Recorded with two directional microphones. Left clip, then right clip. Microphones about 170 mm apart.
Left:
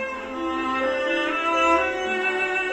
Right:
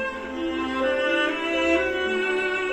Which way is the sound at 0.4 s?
25° right (ahead or behind).